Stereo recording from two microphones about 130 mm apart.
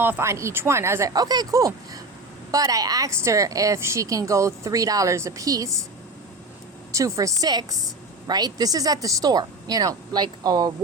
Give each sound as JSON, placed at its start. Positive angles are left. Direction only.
{"t": 0.0, "sound": "a woman's voice", "side_deg": -20}
{"t": 6.9, "sound": "a woman's voice", "side_deg": -25}